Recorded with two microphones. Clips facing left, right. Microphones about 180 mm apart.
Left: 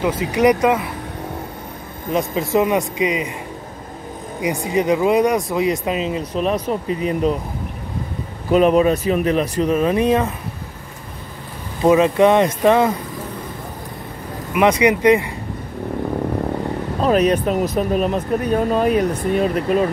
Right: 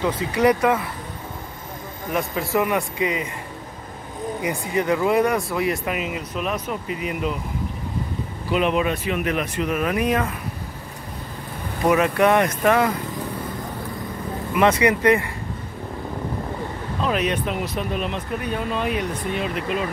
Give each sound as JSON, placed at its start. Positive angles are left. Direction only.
{"t": 0.0, "sound": "speech", "side_deg": 15}
{"t": 2.1, "sound": "speech", "side_deg": 20}
{"t": 4.4, "sound": "speech", "side_deg": 20}
{"t": 8.5, "sound": "speech", "side_deg": 40}
{"t": 11.8, "sound": "speech", "side_deg": 25}
{"t": 14.5, "sound": "speech", "side_deg": 15}
{"t": 17.0, "sound": "speech", "side_deg": 40}